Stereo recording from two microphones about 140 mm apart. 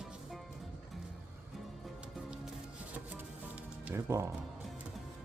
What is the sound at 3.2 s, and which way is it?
Music, 10° right (ahead or behind).